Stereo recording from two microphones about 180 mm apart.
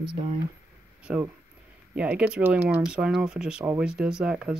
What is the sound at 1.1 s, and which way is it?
Speech, 5° right (ahead or behind).